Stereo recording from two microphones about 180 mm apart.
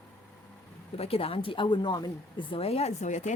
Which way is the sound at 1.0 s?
30° left (ahead or behind).